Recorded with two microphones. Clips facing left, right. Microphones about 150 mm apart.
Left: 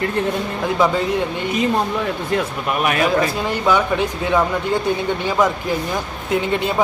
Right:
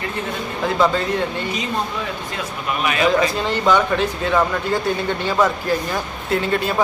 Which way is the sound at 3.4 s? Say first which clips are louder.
Even; 10° left (ahead or behind).